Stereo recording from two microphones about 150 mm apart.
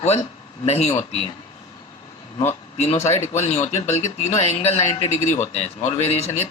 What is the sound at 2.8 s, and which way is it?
Speech, 50° left (ahead or behind).